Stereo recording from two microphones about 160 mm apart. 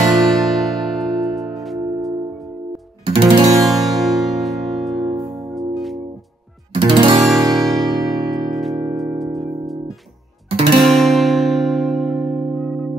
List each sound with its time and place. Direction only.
0.0 s music: centre (ahead or behind)
3.2 s music: 30° right (ahead or behind)
3.5 s music: centre (ahead or behind)
6.8 s music: 30° right (ahead or behind)
7.2 s music: centre (ahead or behind)
10.5 s music: 35° right (ahead or behind)
10.8 s music: centre (ahead or behind)